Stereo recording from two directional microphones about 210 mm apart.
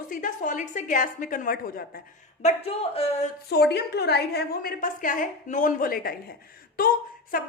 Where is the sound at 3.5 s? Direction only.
50° left (ahead or behind).